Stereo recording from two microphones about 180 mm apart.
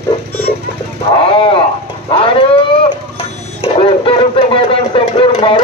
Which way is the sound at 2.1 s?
30° left (ahead or behind).